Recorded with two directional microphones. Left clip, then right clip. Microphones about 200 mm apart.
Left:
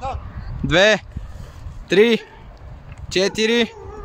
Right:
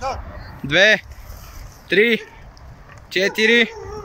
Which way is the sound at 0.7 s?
35° left (ahead or behind).